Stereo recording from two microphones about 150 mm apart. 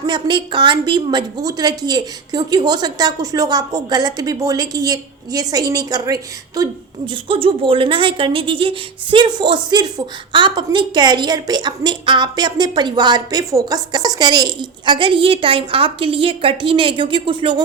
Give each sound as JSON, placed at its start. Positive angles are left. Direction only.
{"t": 0.0, "sound": "a woman's voice", "side_deg": -30}
{"t": 7.1, "sound": "a woman's voice", "side_deg": -35}